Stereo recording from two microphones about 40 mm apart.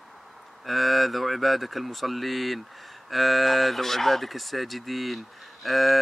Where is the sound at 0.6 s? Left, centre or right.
Centre.